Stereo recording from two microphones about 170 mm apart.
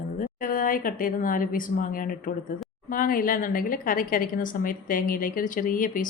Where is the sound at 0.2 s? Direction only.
55° left (ahead or behind).